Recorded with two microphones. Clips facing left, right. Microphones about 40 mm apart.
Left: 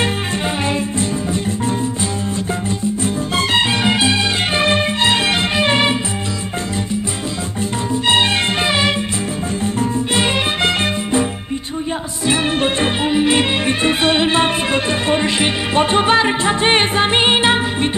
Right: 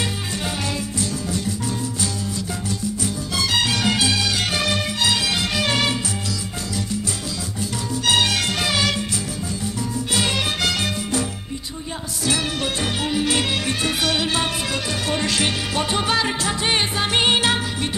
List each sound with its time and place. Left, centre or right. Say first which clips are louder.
3.0 s music: left 6 dB; left
7.9 s music: left 4 dB; left
12.3 s music: left 7 dB; left